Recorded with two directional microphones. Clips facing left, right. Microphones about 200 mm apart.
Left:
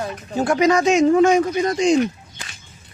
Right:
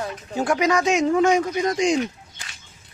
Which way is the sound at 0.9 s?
25° left (ahead or behind).